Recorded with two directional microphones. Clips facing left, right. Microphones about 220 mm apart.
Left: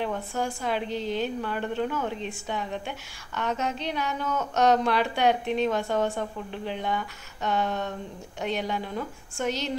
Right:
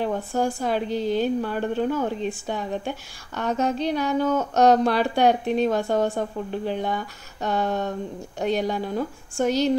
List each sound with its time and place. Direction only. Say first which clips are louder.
0.0 s a woman's voice: right 5 dB; 35° right (ahead or behind)